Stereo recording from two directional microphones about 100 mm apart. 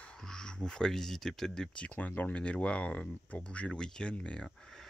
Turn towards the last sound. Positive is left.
turn(degrees=10)  # may be behind; listen again after turning